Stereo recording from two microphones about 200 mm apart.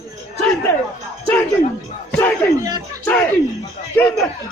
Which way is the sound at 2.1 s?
10° left (ahead or behind).